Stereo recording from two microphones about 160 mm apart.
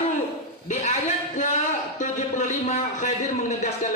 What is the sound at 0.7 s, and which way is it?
Speech, 45° left (ahead or behind).